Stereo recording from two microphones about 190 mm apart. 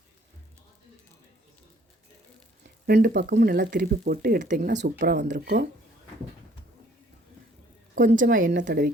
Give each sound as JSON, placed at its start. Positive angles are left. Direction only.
{"t": 2.8, "sound": "speech", "side_deg": -55}
{"t": 4.8, "sound": "speech", "side_deg": -60}
{"t": 5.2, "sound": "speech", "side_deg": -40}
{"t": 7.9, "sound": "speech", "side_deg": -45}